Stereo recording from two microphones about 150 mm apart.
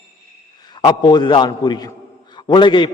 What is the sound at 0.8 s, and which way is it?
A man's voice, 30° left (ahead or behind).